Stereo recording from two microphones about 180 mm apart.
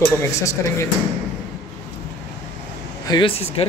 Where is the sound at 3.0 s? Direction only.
30° left (ahead or behind).